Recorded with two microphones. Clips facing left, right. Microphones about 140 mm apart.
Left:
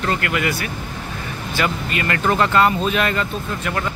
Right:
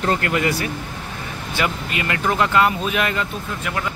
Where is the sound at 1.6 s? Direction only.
15° right (ahead or behind).